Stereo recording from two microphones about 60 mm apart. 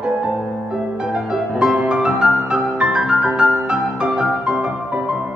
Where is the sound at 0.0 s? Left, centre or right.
Centre.